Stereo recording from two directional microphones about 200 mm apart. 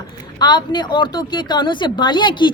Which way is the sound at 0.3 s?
20° left (ahead or behind).